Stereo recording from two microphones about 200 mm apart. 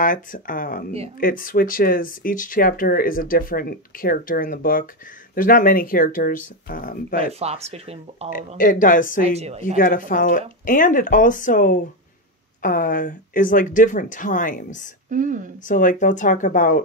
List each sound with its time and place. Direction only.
0.0 s speech: 45° left (ahead or behind)
7.3 s speech: 30° right (ahead or behind)
8.5 s speech: 45° left (ahead or behind)
9.2 s speech: 30° right (ahead or behind)
9.8 s speech: 45° left (ahead or behind)
15.0 s speech: 40° right (ahead or behind)
15.6 s speech: 40° left (ahead or behind)